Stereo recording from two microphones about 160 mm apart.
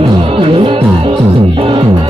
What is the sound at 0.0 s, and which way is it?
Music, 35° right (ahead or behind).